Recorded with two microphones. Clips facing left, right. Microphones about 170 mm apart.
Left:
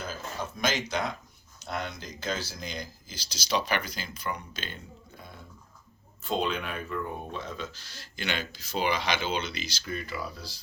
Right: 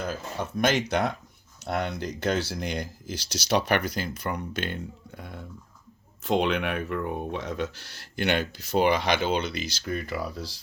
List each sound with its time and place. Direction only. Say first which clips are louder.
0.1 s speech: right 5 dB; 60° right (ahead or behind)